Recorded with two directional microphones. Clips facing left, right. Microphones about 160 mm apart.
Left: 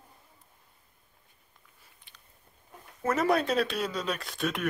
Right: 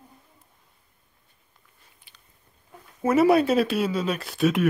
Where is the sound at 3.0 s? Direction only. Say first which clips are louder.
Right 8 dB; 10° right (ahead or behind).